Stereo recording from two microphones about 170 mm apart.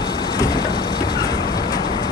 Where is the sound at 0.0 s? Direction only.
25° left (ahead or behind).